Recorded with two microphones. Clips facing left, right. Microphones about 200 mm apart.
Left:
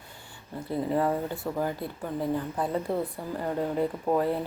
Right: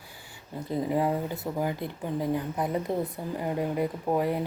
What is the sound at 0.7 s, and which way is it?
Speech, 15° right (ahead or behind).